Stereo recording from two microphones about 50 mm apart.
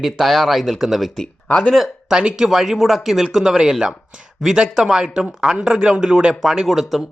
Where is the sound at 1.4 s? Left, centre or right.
Left.